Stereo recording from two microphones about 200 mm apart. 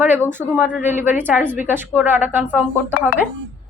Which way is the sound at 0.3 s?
10° right (ahead or behind).